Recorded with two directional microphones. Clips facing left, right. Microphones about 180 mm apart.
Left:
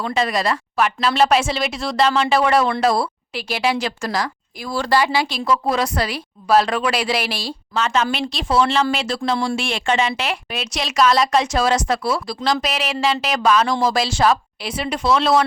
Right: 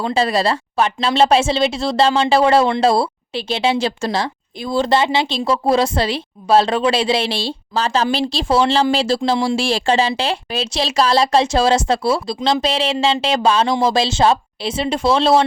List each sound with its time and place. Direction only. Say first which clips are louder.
0.0 s speech: right 3 dB; 30° right (ahead or behind)